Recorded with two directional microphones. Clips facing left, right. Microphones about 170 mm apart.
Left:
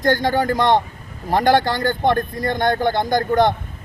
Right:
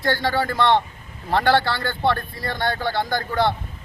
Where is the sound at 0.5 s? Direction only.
15° left (ahead or behind).